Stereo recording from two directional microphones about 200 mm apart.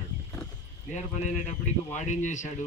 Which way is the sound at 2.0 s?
35° left (ahead or behind).